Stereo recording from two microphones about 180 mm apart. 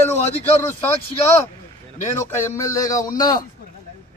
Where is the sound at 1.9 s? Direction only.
15° left (ahead or behind).